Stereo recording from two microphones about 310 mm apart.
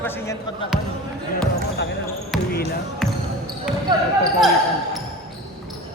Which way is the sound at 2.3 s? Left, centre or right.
Centre.